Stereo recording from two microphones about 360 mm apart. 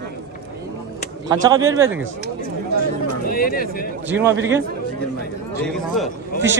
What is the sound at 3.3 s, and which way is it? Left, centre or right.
Speech, left.